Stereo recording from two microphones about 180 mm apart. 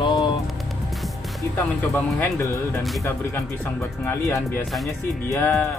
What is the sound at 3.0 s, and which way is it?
Speech, 15° left (ahead or behind).